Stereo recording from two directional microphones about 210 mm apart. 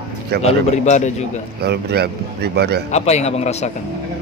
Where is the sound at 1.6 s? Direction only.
50° right (ahead or behind).